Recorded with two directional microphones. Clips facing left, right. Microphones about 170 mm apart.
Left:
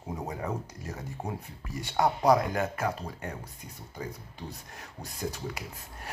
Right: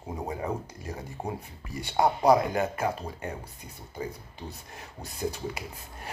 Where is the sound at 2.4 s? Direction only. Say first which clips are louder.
Right 2 dB; 10° right (ahead or behind).